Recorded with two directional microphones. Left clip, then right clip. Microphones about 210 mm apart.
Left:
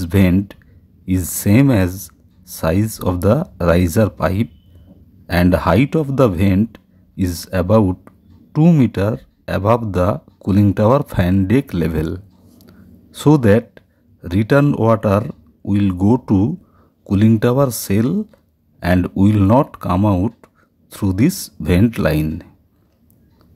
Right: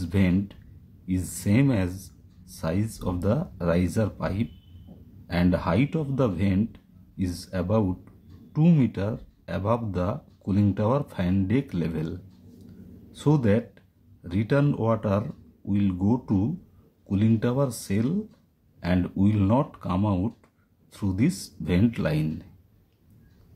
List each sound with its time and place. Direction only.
0.0 s speech: 40° left (ahead or behind)